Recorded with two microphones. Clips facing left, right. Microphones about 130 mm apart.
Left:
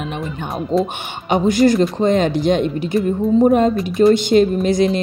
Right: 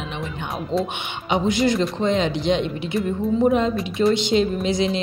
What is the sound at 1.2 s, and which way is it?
Speech, 50° left (ahead or behind).